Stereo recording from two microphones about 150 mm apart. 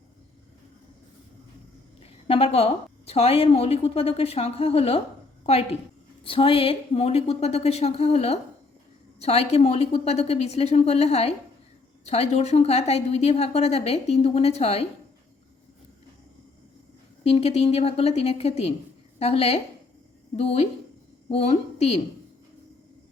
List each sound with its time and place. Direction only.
2.0 s a woman's voice: 40° left (ahead or behind)
17.2 s a woman's voice: 40° left (ahead or behind)